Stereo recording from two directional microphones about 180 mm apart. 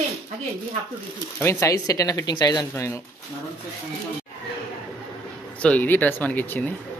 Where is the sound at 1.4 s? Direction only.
15° left (ahead or behind).